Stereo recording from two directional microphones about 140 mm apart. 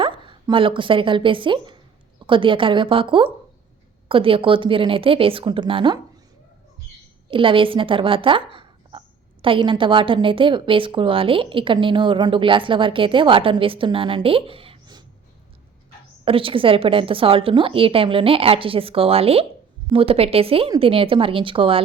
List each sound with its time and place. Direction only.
0.2 s speech: 35° right (ahead or behind)
7.3 s speech: 40° right (ahead or behind)
16.2 s speech: 40° right (ahead or behind)